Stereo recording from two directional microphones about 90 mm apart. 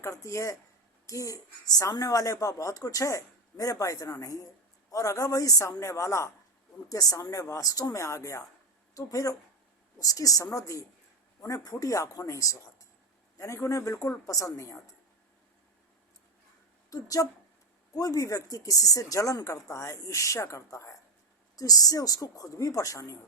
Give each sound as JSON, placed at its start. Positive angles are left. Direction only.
{"t": 0.0, "sound": "a woman's voice", "side_deg": 35}
{"t": 16.9, "sound": "a woman's voice", "side_deg": 40}